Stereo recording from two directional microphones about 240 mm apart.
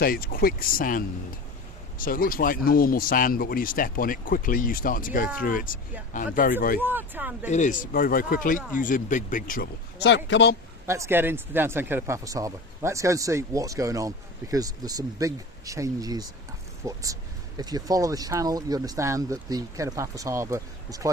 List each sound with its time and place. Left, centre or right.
0.0 s speech: left
6.7 s speech: centre
7.5 s speech: left
10.8 s speech: centre